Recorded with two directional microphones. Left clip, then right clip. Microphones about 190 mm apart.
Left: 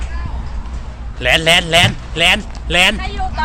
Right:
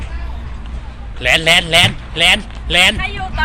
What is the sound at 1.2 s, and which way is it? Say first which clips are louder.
A man's voice: even; 5° left (ahead or behind).